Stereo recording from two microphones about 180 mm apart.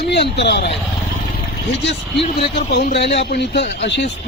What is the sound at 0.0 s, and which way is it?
Speech, 70° left (ahead or behind).